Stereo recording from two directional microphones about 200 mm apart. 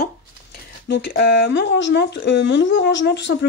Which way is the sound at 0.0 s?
55° left (ahead or behind).